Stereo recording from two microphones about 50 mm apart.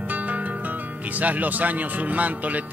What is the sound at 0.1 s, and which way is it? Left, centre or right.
Speech, right.